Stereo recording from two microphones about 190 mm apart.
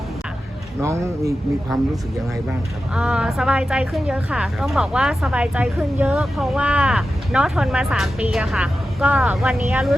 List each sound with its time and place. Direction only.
0.8 s speech: 15° right (ahead or behind)
2.5 s a woman's voice: 5° right (ahead or behind)